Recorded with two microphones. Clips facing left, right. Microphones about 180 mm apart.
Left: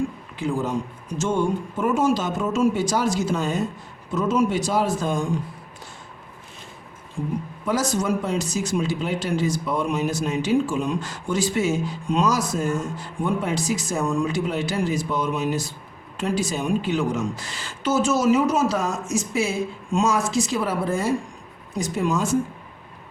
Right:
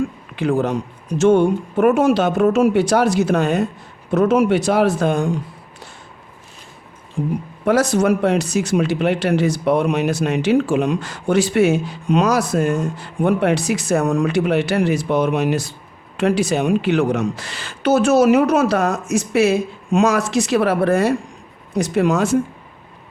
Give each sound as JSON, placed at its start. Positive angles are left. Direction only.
{"t": 0.3, "sound": "speech", "side_deg": -65}
{"t": 7.2, "sound": "speech", "side_deg": -75}